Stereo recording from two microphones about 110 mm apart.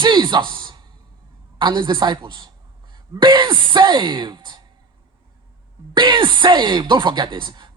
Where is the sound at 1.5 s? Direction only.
50° right (ahead or behind).